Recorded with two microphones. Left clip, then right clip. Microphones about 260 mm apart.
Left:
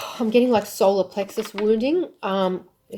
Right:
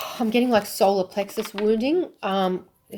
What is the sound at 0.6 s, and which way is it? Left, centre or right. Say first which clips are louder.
Speech: left 1 dB; right.